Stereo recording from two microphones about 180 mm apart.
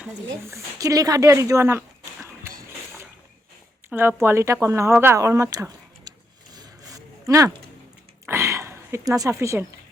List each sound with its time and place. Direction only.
0.4 s speech: 15° right (ahead or behind)
3.8 s a sound: 10° right (ahead or behind)
8.3 s speech: 15° right (ahead or behind)